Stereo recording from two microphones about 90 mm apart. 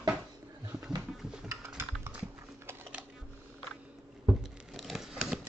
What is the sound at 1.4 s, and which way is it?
Typing, 30° right (ahead or behind).